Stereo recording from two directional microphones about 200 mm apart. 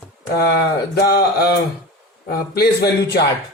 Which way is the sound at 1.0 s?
55° left (ahead or behind).